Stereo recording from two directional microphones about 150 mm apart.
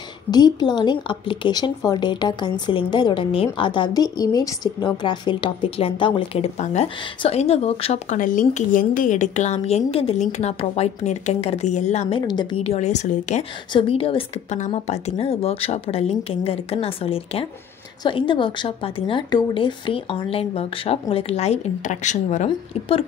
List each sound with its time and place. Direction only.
0.3 s a woman's voice: 30° left (ahead or behind)
8.2 s a woman's voice: 60° left (ahead or behind)
12.3 s a woman's voice: 30° left (ahead or behind)
12.6 s a woman's voice: 50° left (ahead or behind)
13.7 s a woman's voice: 40° left (ahead or behind)